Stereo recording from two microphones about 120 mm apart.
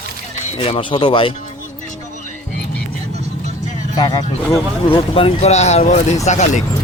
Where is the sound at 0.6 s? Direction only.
45° left (ahead or behind).